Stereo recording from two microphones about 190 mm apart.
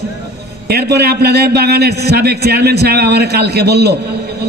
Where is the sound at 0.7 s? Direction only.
60° right (ahead or behind).